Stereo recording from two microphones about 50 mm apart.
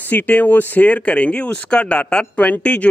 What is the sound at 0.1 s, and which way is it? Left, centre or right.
Speech, left.